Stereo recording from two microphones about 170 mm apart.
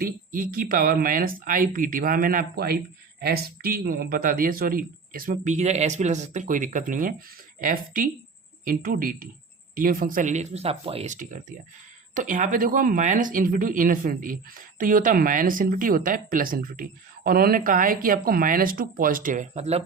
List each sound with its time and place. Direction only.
0.0 s speech: 55° right (ahead or behind)